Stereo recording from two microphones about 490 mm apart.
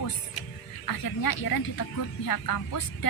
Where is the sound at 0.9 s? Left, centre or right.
Left.